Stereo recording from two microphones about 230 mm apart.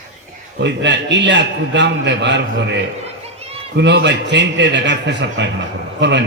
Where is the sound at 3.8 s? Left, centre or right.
Right.